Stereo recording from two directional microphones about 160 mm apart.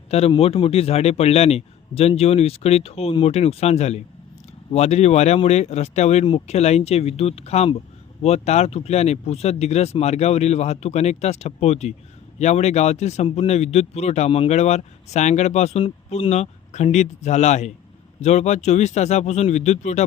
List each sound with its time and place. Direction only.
0.1 s a man's voice: 40° left (ahead or behind)